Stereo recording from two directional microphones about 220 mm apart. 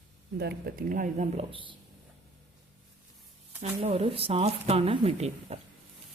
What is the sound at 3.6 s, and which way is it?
Speech, 25° right (ahead or behind).